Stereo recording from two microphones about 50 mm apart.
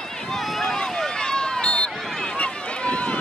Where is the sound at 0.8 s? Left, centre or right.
Centre.